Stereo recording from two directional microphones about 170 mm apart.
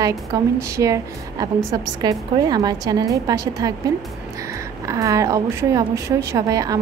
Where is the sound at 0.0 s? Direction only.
20° right (ahead or behind).